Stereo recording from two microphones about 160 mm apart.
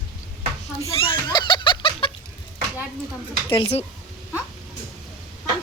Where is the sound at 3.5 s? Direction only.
30° left (ahead or behind).